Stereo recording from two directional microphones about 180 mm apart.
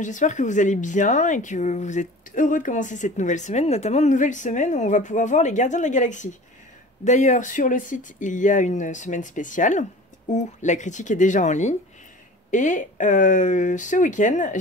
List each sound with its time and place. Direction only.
0.0 s speech: 45° left (ahead or behind)